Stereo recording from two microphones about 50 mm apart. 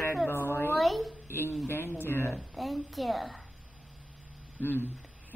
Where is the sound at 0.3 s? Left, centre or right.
Left.